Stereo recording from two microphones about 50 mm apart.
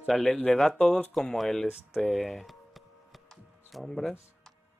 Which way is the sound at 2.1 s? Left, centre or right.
Centre.